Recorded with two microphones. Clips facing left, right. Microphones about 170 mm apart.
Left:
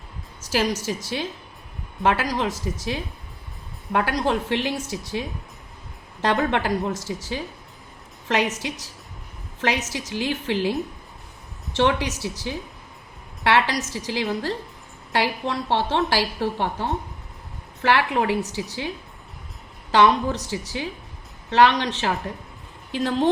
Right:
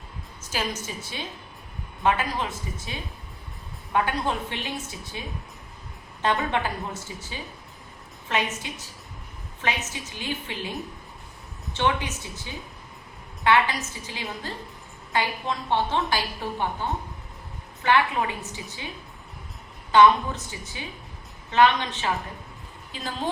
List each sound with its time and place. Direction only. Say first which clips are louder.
0.4 s a woman's voice: left 7 dB; 80° left
6.5 s a woman's voice: left 5 dB; 75° left (ahead or behind)
19.9 s a woman's voice: even; 80° left